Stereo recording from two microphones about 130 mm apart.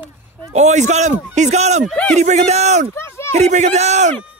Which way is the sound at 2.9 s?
20° left (ahead or behind).